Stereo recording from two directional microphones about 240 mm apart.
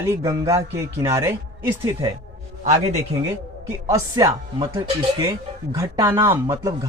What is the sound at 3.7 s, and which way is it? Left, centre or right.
A man's voice, centre.